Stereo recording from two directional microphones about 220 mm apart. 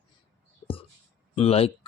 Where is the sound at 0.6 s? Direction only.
25° left (ahead or behind).